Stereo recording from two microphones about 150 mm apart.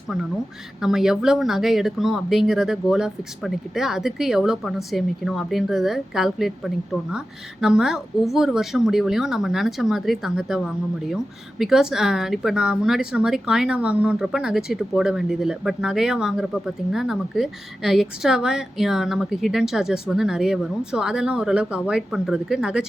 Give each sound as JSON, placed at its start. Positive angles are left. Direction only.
{"t": 0.8, "sound": "a woman's voice", "side_deg": -5}
{"t": 7.6, "sound": "a woman's voice", "side_deg": -5}